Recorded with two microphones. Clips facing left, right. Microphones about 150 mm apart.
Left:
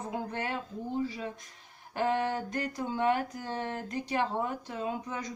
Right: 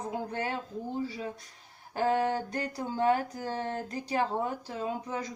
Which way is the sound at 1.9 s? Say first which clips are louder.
Right 2 dB; 35° right (ahead or behind).